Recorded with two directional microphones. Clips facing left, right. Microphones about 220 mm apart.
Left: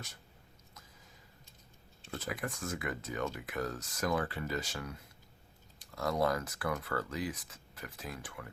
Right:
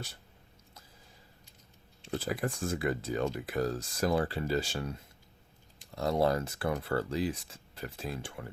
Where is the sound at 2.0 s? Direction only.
30° right (ahead or behind).